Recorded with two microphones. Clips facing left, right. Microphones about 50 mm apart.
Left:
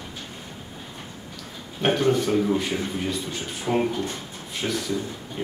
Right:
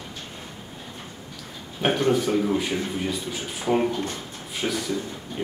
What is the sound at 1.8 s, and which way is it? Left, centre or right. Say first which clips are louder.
A man's voice: even; centre.